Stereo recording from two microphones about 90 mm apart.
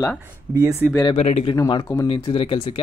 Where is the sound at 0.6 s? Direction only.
40° right (ahead or behind).